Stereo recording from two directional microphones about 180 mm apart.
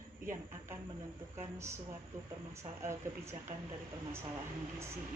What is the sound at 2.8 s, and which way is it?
Speech, 15° right (ahead or behind).